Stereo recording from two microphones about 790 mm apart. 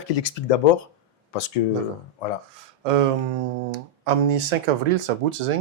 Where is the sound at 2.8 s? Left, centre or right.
Right.